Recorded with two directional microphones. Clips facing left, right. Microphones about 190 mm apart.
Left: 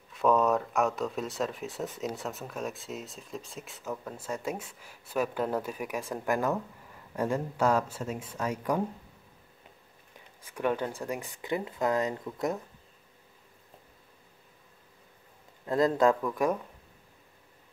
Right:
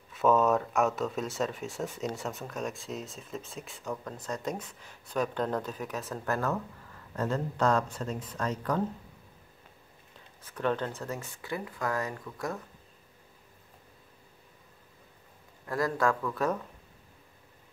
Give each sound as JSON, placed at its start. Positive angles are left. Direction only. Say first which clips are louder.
{"t": 0.1, "sound": "speech", "louder": "even", "side_deg": 0}
{"t": 10.1, "sound": "speech", "louder": "left 2 dB", "side_deg": 10}
{"t": 15.6, "sound": "speech", "louder": "left 5 dB", "side_deg": 20}